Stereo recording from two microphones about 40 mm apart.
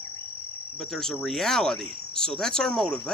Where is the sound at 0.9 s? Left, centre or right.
Centre.